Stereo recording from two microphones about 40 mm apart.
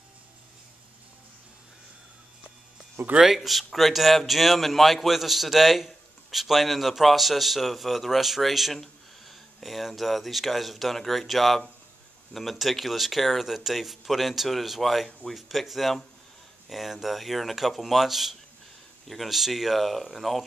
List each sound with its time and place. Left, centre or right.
3.0 s speech: right
3.3 s a man's voice: centre